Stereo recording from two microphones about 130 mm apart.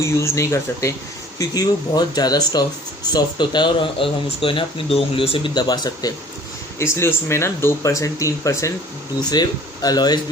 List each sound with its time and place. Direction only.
0.0 s speech: 20° left (ahead or behind); by 5.5 s 45° left (ahead or behind)
5.5 s speech: 35° left (ahead or behind)
6.7 s speech: 20° left (ahead or behind)